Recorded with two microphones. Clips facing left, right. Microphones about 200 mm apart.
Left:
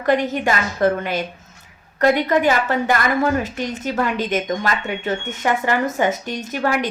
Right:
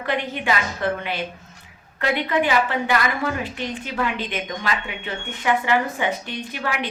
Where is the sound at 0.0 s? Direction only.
45° left (ahead or behind).